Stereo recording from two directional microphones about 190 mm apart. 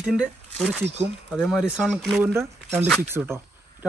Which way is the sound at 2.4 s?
15° right (ahead or behind).